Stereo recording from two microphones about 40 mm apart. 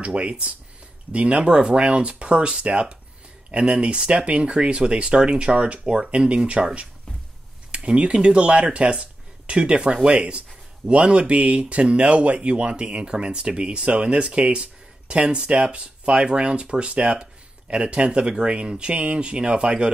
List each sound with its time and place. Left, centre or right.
0.0 s speech: right